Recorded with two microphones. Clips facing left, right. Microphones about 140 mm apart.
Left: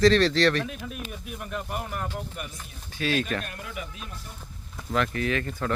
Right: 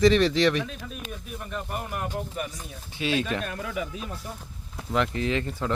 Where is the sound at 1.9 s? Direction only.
15° right (ahead or behind).